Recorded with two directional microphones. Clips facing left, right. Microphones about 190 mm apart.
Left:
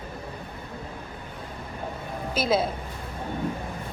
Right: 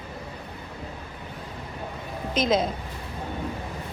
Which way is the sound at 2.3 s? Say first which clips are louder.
Right 1 dB; 5° left (ahead or behind).